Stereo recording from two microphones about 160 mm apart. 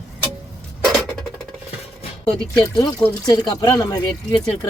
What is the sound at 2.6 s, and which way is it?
Speech, 25° left (ahead or behind).